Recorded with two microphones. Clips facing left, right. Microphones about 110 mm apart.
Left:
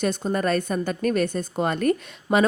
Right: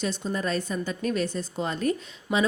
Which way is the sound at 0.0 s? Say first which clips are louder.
Left 5 dB; 55° left (ahead or behind).